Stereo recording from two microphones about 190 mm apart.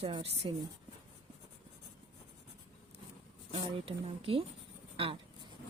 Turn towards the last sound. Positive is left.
turn(degrees=-30)  # may be behind; listen again after turning